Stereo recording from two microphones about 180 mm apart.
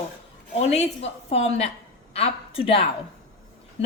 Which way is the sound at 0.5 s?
40° left (ahead or behind).